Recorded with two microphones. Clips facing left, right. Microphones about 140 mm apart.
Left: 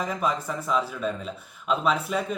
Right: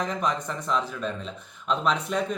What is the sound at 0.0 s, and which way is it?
Speech, 5° left (ahead or behind).